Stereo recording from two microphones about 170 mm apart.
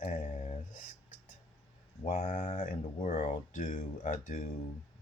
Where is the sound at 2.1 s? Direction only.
45° left (ahead or behind).